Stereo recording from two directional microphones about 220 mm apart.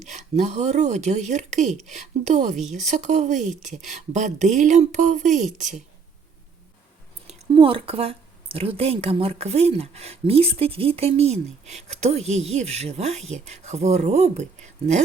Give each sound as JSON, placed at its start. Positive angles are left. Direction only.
{"t": 0.0, "sound": "speech", "side_deg": -30}
{"t": 2.6, "sound": "speech", "side_deg": 0}
{"t": 2.8, "sound": "speech", "side_deg": -30}
{"t": 7.3, "sound": "speech", "side_deg": -25}